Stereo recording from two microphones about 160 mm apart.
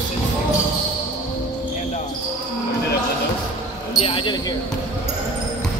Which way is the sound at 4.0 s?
35° left (ahead or behind).